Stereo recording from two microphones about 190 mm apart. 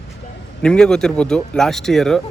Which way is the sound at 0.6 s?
5° left (ahead or behind).